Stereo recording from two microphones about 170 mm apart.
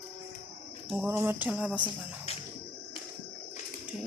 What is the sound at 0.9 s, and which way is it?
Cricket, 15° right (ahead or behind).